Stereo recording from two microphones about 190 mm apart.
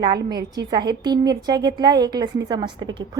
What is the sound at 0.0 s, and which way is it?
A woman's voice, 20° right (ahead or behind).